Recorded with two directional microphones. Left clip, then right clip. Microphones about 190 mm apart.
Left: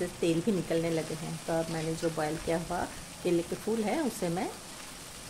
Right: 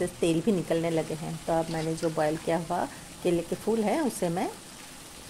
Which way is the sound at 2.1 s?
15° right (ahead or behind).